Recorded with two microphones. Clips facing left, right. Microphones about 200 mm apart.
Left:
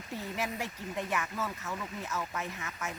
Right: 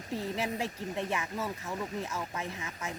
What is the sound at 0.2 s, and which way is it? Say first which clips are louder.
Speech: right 2 dB; 30° right (ahead or behind).